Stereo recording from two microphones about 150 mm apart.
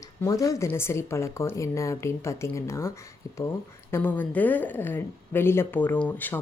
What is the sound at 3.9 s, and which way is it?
Speech, 10° left (ahead or behind).